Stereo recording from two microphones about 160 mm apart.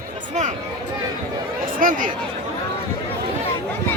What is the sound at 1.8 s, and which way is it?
Speech, 55° right (ahead or behind).